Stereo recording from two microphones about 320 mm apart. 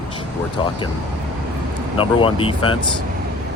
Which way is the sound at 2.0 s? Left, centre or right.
Centre.